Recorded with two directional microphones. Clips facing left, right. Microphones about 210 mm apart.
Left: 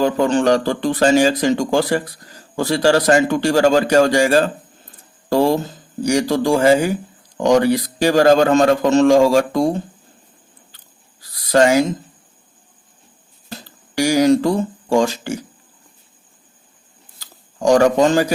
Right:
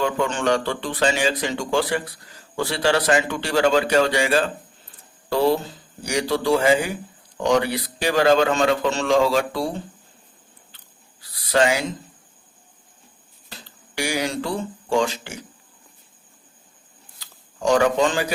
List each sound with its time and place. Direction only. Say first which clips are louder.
0.0 s a man's voice: left 7 dB; 35° left (ahead or behind)
11.2 s a sound: left 5 dB; 40° left (ahead or behind)
13.5 s speech: left 9 dB; 40° left (ahead or behind)
17.2 s shuffling cards: left 6 dB; 45° left (ahead or behind)